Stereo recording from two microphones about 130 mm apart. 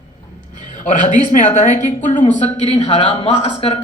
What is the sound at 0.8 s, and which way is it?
A man's voice, 70° left (ahead or behind).